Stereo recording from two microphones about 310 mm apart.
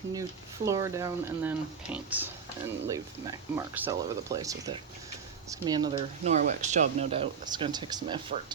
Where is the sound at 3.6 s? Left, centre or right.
Centre.